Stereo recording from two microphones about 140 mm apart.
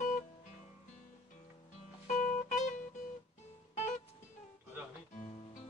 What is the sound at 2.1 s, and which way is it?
Music, 65° left (ahead or behind).